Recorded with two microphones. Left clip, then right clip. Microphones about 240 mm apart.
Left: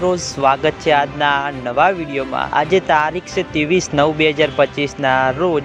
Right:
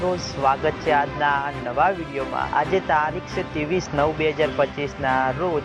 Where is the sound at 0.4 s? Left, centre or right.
Left.